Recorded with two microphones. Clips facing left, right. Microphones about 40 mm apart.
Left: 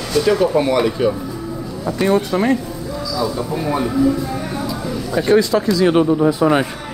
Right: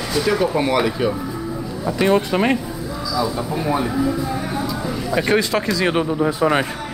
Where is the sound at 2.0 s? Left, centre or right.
Right.